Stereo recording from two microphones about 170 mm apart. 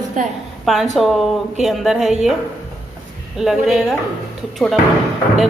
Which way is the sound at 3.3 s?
Centre (ahead or behind).